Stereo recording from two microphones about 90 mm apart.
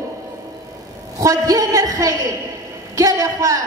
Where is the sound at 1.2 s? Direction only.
40° right (ahead or behind).